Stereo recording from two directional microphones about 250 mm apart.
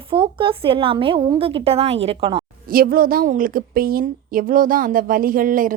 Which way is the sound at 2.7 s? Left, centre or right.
Right.